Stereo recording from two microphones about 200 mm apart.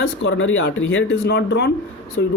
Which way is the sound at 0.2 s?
75° left (ahead or behind).